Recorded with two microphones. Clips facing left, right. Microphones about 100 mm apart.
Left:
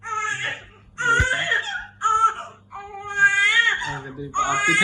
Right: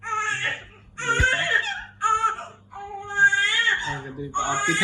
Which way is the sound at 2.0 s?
20° left (ahead or behind).